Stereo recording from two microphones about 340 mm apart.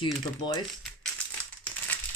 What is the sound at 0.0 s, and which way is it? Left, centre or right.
Speech, centre.